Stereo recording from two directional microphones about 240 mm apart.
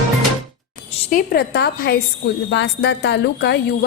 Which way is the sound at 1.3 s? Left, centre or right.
Left.